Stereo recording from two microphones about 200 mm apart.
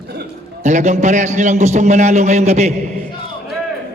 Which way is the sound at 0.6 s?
35° right (ahead or behind).